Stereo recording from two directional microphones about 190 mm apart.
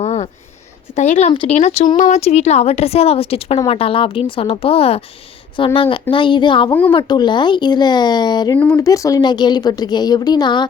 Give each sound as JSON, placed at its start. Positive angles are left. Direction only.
{"t": 0.0, "sound": "a sound", "side_deg": 35}
{"t": 0.9, "sound": "a woman's voice", "side_deg": 40}
{"t": 8.5, "sound": "a woman's voice", "side_deg": 10}